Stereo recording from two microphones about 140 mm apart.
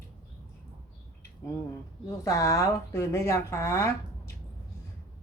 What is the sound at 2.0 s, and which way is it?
Speech, 20° left (ahead or behind).